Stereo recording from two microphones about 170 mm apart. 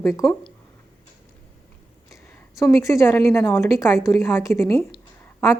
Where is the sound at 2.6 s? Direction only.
15° left (ahead or behind).